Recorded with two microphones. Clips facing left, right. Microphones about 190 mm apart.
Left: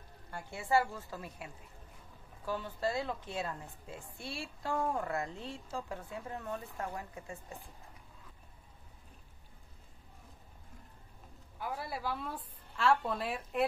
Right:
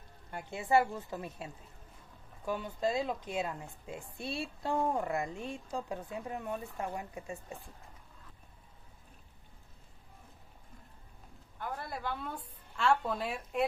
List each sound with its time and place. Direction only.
0.3 s a woman's voice: 20° right (ahead or behind)
11.5 s a woman's voice: 5° left (ahead or behind)